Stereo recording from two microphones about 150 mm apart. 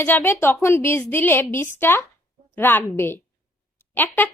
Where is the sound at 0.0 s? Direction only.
15° left (ahead or behind).